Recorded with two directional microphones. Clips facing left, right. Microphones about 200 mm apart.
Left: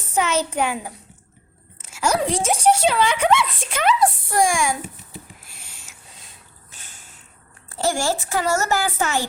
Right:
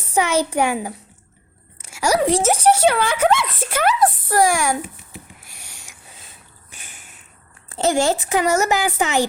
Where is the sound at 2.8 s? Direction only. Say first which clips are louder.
Right 2 dB; 60° right (ahead or behind).